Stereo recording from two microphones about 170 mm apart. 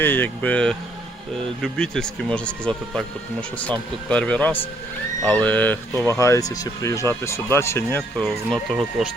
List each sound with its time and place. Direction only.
0.0 s speech: 10° left (ahead or behind)
6.1 s speech: 15° left (ahead or behind)
8.1 s speech: centre (ahead or behind)